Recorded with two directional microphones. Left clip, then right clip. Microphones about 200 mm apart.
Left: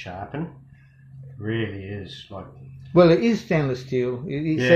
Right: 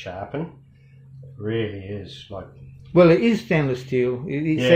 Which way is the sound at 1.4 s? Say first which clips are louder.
Right 2 dB; 15° right (ahead or behind).